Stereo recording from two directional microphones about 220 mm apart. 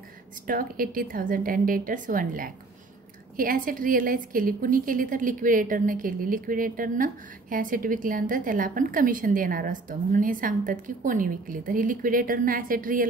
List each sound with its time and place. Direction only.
0.5 s a woman's voice: 40° right (ahead or behind)